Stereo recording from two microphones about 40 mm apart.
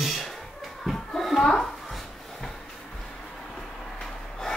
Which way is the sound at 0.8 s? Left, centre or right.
Centre.